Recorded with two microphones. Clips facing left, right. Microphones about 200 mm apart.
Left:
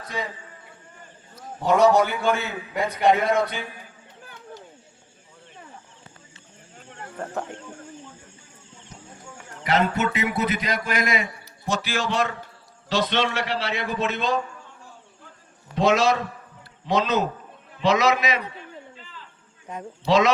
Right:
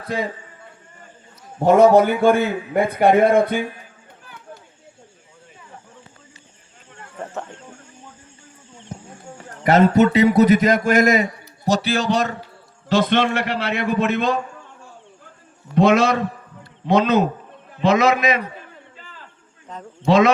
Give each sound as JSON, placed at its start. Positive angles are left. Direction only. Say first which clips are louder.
{"t": 1.5, "sound": "a man's voice", "louder": "right 6 dB", "side_deg": -50}
{"t": 9.6, "sound": "a man's voice", "louder": "right 9 dB", "side_deg": -45}
{"t": 12.9, "sound": "a man's voice", "louder": "right 6 dB", "side_deg": -50}
{"t": 15.7, "sound": "a man's voice", "louder": "right 4 dB", "side_deg": -55}
{"t": 19.7, "sound": "a man's voice", "louder": "left 1 dB", "side_deg": 10}
{"t": 20.1, "sound": "a man's voice", "louder": "right 4 dB", "side_deg": -55}